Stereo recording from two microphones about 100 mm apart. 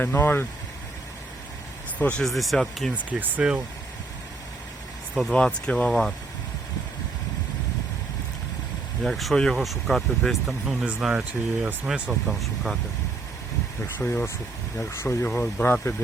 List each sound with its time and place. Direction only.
0.0 s speech: 20° left (ahead or behind)
2.0 s speech: 15° left (ahead or behind)
2.2 s speech: centre (ahead or behind)
2.9 s speech: 15° right (ahead or behind)
5.2 s speech: 10° left (ahead or behind)
9.0 s speech: centre (ahead or behind)
13.8 s speech: 20° left (ahead or behind)